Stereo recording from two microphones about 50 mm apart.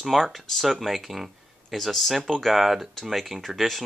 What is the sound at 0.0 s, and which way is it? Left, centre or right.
Speech, centre.